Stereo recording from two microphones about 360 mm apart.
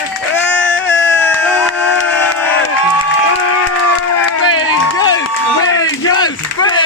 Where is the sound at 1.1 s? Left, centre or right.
Centre.